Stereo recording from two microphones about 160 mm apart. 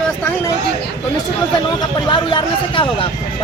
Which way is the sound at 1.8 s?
25° left (ahead or behind).